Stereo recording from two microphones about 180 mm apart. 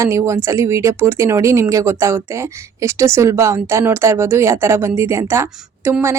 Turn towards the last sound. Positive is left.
turn(degrees=-15)  # may be behind; listen again after turning